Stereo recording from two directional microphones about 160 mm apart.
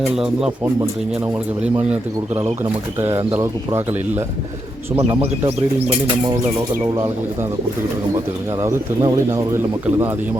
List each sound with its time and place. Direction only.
0.0 s speech: 5° right (ahead or behind)
3.0 s speech: 15° right (ahead or behind)
8.6 s speech: 20° right (ahead or behind)